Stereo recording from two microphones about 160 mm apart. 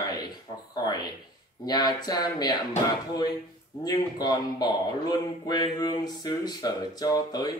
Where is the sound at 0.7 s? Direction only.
25° left (ahead or behind).